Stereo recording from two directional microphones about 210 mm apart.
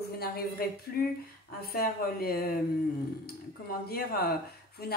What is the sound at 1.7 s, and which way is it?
Speech, 45° left (ahead or behind).